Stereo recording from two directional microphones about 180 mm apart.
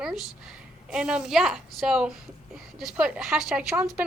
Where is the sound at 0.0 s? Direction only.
5° right (ahead or behind).